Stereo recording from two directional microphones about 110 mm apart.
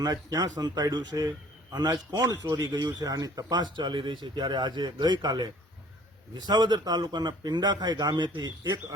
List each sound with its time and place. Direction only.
0.0 s speech: 35° right (ahead or behind)